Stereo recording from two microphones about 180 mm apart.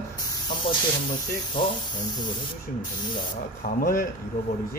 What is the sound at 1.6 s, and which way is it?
Speech, 30° left (ahead or behind).